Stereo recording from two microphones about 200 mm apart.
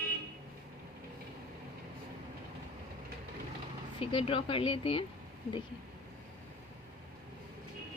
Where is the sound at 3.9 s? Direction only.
25° left (ahead or behind).